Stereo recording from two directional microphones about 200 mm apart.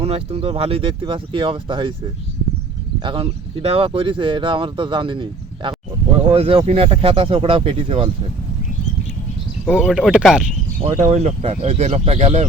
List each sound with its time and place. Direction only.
0.0 s speech: 30° right (ahead or behind)
3.0 s speech: 25° right (ahead or behind)
9.6 s speech: 5° right (ahead or behind)
10.8 s speech: 40° right (ahead or behind)